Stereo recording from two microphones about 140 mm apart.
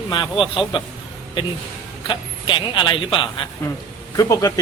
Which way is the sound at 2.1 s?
35° left (ahead or behind).